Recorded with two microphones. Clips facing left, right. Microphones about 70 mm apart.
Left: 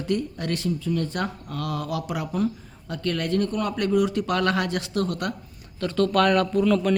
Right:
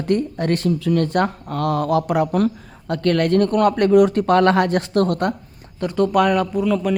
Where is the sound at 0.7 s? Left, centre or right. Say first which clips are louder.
Right 8 dB; right.